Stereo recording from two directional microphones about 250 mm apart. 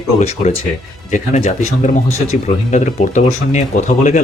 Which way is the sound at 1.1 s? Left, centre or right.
Left.